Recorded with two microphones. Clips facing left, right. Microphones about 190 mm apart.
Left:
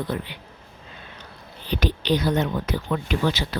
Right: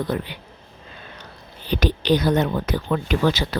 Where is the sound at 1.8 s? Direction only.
40° right (ahead or behind).